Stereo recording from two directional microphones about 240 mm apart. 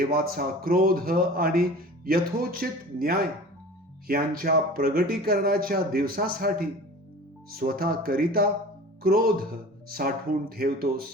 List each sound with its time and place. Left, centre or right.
0.0 s speech: right
4.4 s speech: right